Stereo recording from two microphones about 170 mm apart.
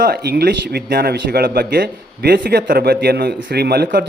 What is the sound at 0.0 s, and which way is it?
A man's voice, 70° right (ahead or behind).